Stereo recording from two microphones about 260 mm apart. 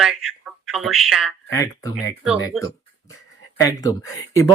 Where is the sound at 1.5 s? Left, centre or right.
Centre.